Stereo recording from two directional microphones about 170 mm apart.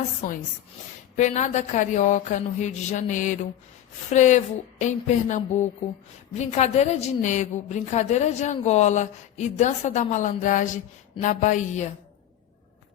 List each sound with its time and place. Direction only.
1.1 s a woman's voice: 45° left (ahead or behind)